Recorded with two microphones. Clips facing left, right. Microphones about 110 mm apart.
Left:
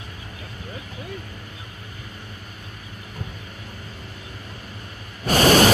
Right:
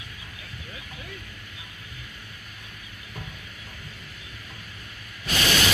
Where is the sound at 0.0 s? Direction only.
40° left (ahead or behind).